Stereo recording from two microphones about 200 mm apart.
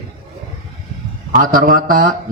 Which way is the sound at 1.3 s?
45° right (ahead or behind).